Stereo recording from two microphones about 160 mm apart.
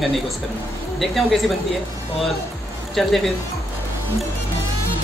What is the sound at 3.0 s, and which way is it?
Speech, centre (ahead or behind).